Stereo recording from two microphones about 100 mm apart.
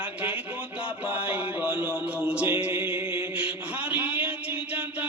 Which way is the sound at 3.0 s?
60° left (ahead or behind).